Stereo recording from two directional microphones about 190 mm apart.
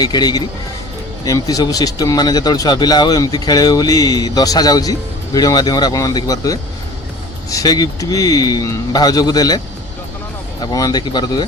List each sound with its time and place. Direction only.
0.0 s speech: 20° left (ahead or behind)
10.6 s speech: 20° left (ahead or behind)